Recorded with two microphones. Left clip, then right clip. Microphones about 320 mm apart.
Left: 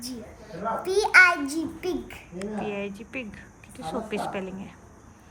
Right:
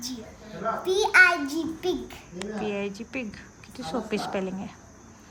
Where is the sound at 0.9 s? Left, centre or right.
Centre.